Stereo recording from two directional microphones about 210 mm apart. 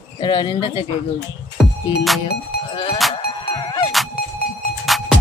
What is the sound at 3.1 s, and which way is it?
Music, 20° left (ahead or behind).